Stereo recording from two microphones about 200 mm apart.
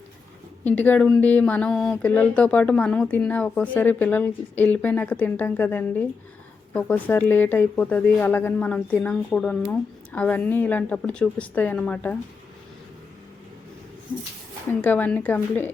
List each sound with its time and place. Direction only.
0.6 s speech: 10° left (ahead or behind)
14.7 s speech: 10° left (ahead or behind)